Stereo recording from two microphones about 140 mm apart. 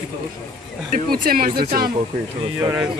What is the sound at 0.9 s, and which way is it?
Speech, 85° right.